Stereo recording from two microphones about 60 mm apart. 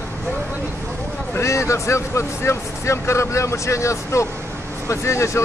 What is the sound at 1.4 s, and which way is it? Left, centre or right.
Speech, left.